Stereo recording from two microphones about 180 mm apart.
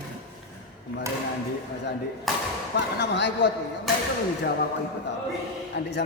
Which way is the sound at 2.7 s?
70° left (ahead or behind).